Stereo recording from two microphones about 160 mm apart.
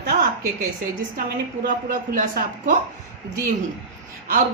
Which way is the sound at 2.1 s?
55° right (ahead or behind).